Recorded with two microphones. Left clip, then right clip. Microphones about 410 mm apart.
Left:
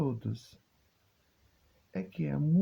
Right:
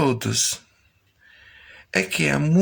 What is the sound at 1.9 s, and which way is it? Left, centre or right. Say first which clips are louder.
Speech: right 18 dB; left.